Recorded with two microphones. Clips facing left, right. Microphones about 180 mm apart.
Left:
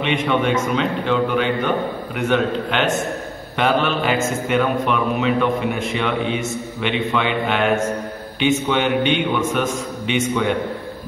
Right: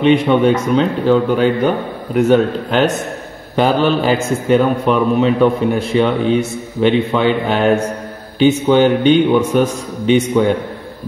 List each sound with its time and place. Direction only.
0.0 s a man's voice: 35° right (ahead or behind)